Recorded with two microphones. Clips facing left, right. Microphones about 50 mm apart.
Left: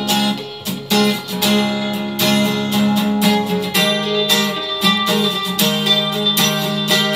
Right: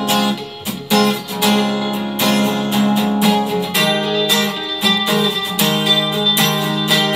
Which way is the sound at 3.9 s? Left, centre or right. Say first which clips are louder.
Right 1 dB; centre.